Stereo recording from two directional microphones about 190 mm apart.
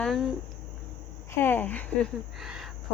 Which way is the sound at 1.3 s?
10° left (ahead or behind).